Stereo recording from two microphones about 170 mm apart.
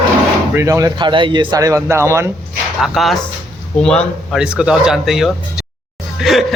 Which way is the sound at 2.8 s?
Centre (ahead or behind).